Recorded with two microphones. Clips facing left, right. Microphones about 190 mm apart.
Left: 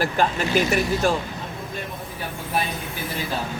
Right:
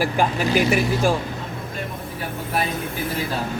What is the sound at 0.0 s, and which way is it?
Speech, 10° right (ahead or behind).